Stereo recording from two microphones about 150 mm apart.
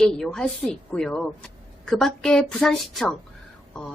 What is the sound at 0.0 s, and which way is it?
A woman's voice, 5° left (ahead or behind).